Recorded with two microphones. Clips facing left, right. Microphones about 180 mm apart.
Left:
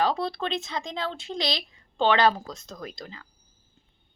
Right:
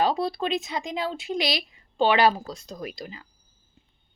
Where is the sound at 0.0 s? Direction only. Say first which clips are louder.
Right 2 dB; 15° right (ahead or behind).